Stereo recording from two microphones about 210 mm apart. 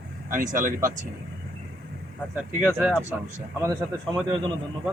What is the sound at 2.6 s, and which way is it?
Speech, centre (ahead or behind).